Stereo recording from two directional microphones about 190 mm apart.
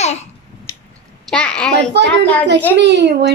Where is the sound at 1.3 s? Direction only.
5° left (ahead or behind).